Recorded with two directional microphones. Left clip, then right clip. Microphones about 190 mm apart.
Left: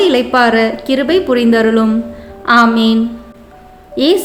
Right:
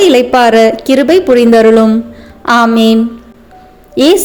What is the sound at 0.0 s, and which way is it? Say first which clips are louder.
A woman's voice: right 4 dB; 35° right (ahead or behind).